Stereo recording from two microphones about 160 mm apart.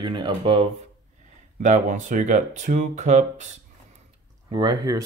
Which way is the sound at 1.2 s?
50° right (ahead or behind).